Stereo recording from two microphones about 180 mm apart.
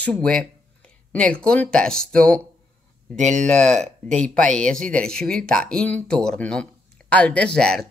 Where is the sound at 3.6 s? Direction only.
40° right (ahead or behind).